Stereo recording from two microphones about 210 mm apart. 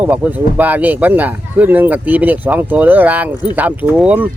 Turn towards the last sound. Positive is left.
turn(degrees=-5)  # may be behind; listen again after turning